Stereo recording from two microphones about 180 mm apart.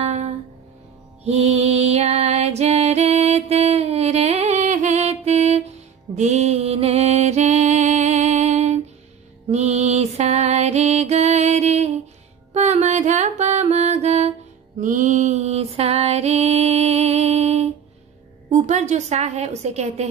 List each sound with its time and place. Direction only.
0.0 s music: 35° right (ahead or behind)
18.5 s a woman's voice: 40° right (ahead or behind)